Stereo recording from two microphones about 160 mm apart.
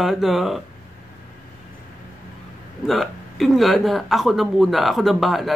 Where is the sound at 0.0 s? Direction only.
Centre (ahead or behind).